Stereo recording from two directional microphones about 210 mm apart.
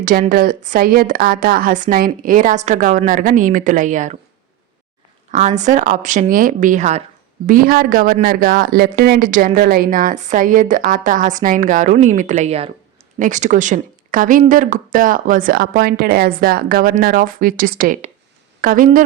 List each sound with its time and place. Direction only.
0.0 s speech: 40° right (ahead or behind)
5.3 s speech: 35° right (ahead or behind)